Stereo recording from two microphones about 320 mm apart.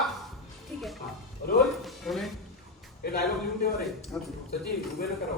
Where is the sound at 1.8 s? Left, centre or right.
Centre.